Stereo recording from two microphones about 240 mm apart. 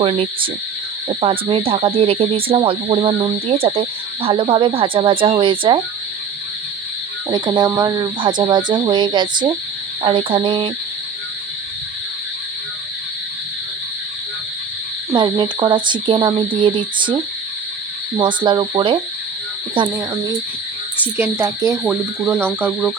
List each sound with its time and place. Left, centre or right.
0.0 s cricket: right
7.3 s cricket: centre
15.1 s cricket: centre
18.2 s cricket: centre
21.2 s cricket: centre